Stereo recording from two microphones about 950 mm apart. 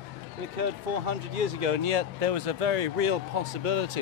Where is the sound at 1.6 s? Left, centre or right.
Right.